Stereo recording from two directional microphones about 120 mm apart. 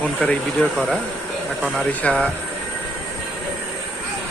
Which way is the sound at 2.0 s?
10° left (ahead or behind).